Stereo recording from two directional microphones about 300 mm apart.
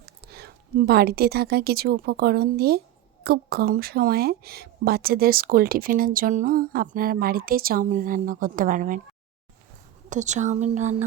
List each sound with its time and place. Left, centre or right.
0.0 s a woman's voice: right
10.1 s speech: right